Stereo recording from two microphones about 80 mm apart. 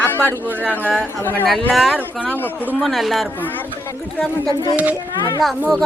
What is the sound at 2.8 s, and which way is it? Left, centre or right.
Speech, centre.